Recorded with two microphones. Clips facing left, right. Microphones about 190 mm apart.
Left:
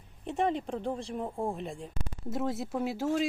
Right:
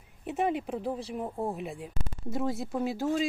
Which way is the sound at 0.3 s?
5° right (ahead or behind).